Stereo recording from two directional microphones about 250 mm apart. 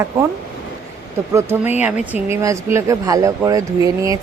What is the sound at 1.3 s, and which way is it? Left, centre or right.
Speech, centre.